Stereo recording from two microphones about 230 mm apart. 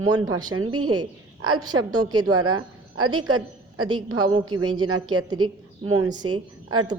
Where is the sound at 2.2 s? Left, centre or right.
Right.